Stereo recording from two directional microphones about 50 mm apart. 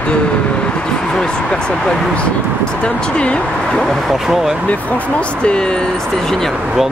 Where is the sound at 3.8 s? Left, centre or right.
Centre.